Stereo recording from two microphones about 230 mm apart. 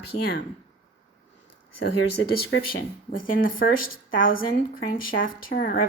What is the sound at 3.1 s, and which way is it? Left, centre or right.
Speech, left.